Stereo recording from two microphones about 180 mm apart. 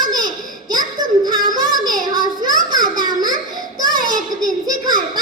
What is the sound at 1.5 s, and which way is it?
Child singing, 20° right (ahead or behind).